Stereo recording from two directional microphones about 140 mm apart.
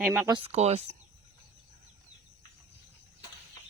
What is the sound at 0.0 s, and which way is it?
Speech, 15° right (ahead or behind).